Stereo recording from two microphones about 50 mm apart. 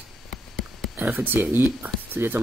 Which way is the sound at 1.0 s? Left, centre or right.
Right.